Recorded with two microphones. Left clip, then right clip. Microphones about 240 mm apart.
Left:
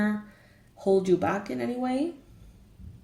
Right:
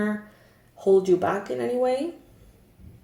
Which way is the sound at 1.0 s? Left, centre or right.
Left.